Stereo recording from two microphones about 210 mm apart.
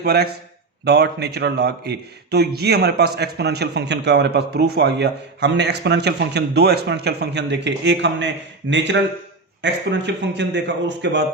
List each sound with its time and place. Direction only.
0.0 s a man's voice: 50° right (ahead or behind)